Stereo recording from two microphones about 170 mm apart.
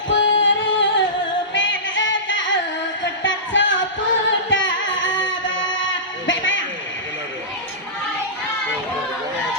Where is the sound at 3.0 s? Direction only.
90° left.